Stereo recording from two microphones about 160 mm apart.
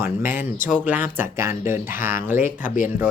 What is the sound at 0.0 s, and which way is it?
Speech, 15° right (ahead or behind).